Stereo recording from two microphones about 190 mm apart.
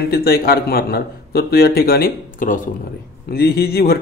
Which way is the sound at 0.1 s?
55° left (ahead or behind).